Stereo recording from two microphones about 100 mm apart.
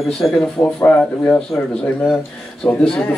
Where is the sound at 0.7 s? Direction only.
15° left (ahead or behind).